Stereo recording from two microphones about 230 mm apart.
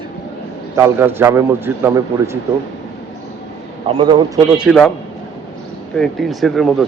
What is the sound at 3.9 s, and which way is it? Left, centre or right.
Speech, right.